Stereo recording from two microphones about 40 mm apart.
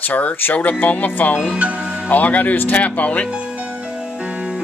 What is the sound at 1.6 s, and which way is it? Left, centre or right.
Speech, right.